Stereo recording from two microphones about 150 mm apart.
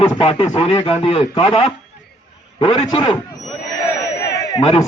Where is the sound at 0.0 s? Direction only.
40° left (ahead or behind).